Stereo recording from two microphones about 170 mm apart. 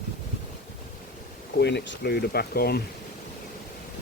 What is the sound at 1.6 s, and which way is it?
Speech, 80° left.